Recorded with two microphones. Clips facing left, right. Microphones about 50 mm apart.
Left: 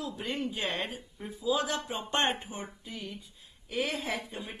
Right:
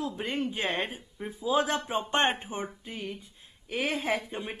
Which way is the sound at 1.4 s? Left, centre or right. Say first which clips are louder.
Right 3 dB; right.